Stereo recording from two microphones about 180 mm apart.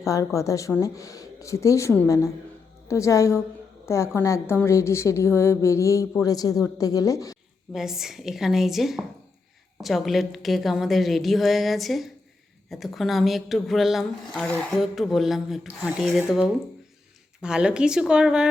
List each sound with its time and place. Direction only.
0.3 s a woman's voice: 15° left (ahead or behind)
7.7 s speech: centre (ahead or behind)